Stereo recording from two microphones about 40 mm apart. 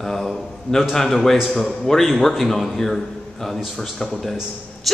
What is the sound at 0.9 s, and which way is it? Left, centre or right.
A man's voice, centre.